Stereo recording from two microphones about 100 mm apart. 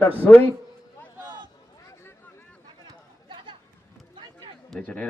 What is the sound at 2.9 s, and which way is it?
Chatter, 55° right (ahead or behind).